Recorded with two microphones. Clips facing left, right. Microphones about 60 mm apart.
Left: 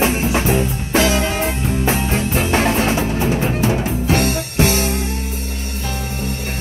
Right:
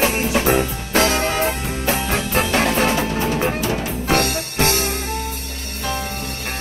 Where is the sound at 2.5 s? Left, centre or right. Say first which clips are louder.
Left 3 dB; left.